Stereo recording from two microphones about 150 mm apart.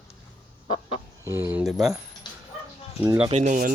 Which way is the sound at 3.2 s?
45° right (ahead or behind).